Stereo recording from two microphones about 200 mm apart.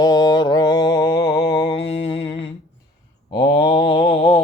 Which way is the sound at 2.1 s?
25° left (ahead or behind).